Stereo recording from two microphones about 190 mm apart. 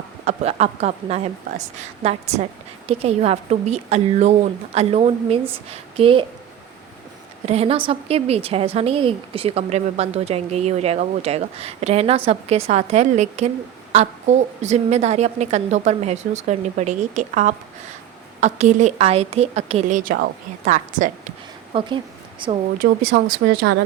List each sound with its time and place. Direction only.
0.3 s a woman's voice: 35° right (ahead or behind)
7.4 s a woman's voice: 35° right (ahead or behind)
21.7 s a woman's voice: 25° right (ahead or behind)